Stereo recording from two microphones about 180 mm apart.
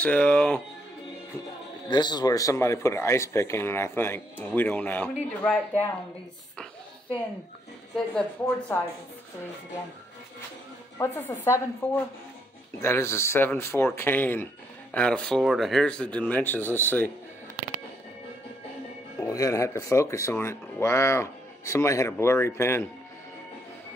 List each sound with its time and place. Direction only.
0.0 s speech: 10° left (ahead or behind)
1.9 s speech: 25° left (ahead or behind); by 5.9 s 10° left (ahead or behind)
7.9 s speech: 5° left (ahead or behind)
11.0 s speech: 10° left (ahead or behind)
19.1 s speech: 15° left (ahead or behind)